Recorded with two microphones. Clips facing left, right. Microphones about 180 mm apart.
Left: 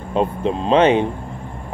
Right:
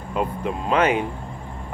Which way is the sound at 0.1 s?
25° left (ahead or behind).